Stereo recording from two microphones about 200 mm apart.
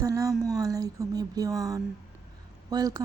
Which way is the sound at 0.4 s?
20° right (ahead or behind).